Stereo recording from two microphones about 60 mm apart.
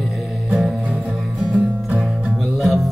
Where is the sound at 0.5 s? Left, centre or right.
Centre.